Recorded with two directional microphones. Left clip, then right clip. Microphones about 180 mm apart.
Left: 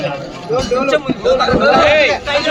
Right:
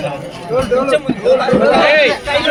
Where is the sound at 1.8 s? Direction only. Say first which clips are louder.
Even; 55° right (ahead or behind).